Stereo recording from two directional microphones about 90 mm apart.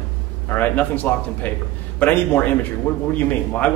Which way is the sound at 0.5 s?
20° left (ahead or behind).